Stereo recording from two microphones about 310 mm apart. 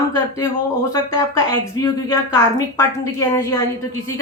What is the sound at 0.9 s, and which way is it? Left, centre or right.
Speech, centre.